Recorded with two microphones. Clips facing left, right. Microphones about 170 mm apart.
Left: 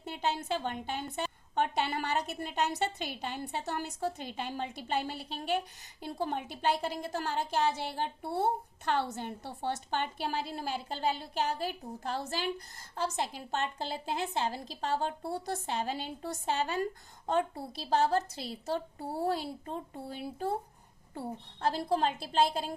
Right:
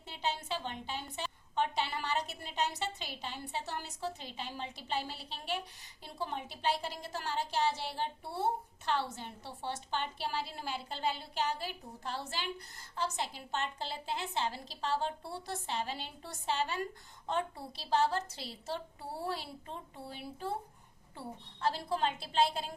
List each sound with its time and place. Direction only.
0.0 s a woman's voice: 50° left (ahead or behind)